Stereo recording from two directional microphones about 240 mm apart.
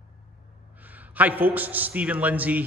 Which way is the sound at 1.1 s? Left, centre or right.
Centre.